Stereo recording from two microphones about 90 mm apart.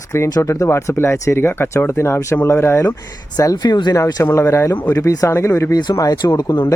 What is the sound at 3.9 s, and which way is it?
Speech, 30° left (ahead or behind).